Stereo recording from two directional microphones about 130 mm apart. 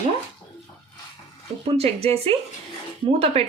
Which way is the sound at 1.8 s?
50° right (ahead or behind).